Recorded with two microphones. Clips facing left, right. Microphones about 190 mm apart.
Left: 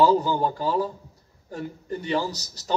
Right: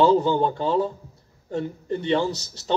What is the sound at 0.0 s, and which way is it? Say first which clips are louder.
A man's voice: right 2 dB; 25° right (ahead or behind).